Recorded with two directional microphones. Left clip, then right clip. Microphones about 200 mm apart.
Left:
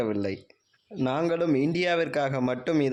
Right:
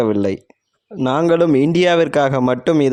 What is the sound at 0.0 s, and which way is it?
A man's voice, 45° right (ahead or behind).